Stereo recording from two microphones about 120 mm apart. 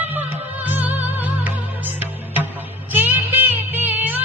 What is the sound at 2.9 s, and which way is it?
Music, 15° right (ahead or behind).